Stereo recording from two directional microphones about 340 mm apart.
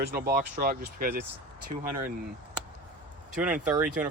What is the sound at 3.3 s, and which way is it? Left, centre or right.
Speech, centre.